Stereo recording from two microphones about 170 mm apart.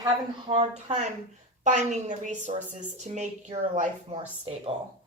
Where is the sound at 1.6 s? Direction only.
45° right (ahead or behind).